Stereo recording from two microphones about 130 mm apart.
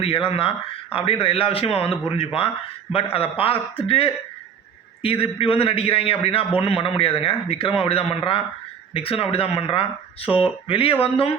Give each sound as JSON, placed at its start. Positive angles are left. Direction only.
{"t": 0.0, "sound": "a man's voice", "side_deg": 45}